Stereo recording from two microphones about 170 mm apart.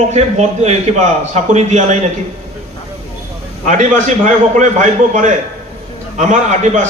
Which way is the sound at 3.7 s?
45° right (ahead or behind).